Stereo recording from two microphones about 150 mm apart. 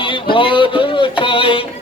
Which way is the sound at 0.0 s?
35° left (ahead or behind).